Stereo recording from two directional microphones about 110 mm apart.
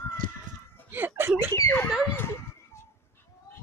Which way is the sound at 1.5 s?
20° left (ahead or behind).